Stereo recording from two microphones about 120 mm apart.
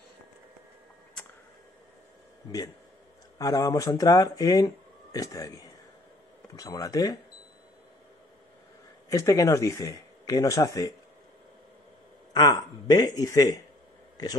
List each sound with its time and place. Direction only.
3.3 s speech: 30° left (ahead or behind)
9.1 s speech: 25° left (ahead or behind)
12.4 s speech: 35° left (ahead or behind)